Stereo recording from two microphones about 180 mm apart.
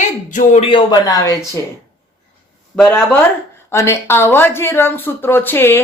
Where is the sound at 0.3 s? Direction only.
45° left (ahead or behind).